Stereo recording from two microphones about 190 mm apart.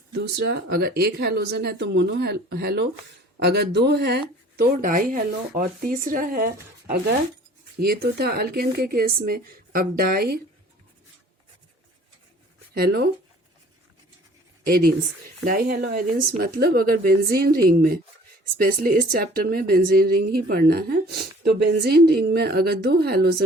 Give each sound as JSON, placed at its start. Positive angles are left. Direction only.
{"t": 0.1, "sound": "a woman's voice", "side_deg": -60}
{"t": 8.2, "sound": "a woman's voice", "side_deg": -55}
{"t": 12.7, "sound": "speech", "side_deg": -55}
{"t": 14.7, "sound": "a woman's voice", "side_deg": -50}